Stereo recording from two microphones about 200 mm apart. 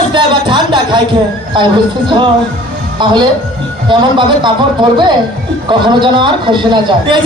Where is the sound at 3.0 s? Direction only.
25° right (ahead or behind).